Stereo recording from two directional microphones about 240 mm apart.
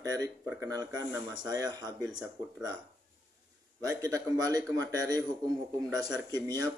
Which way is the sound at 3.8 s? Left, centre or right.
Centre.